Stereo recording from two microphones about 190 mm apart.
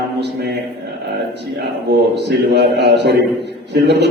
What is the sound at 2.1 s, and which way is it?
A man's voice, 60° right (ahead or behind).